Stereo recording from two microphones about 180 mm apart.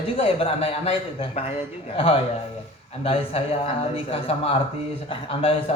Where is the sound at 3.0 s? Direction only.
30° left (ahead or behind).